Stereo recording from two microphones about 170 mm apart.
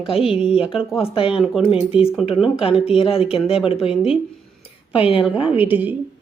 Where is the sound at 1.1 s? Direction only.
35° left (ahead or behind).